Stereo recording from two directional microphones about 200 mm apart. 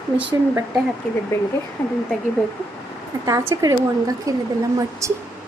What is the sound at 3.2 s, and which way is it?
A woman's voice, 15° right (ahead or behind).